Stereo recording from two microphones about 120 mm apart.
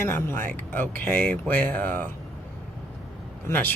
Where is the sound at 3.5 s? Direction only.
15° left (ahead or behind).